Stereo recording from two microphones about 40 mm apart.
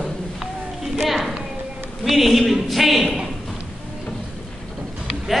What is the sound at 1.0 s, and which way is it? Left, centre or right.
Music, centre.